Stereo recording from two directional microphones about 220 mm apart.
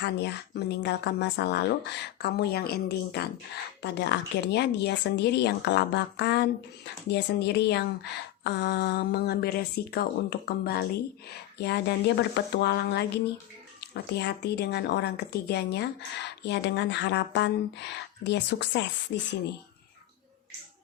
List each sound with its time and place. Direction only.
0.8 s speech: 50° left (ahead or behind)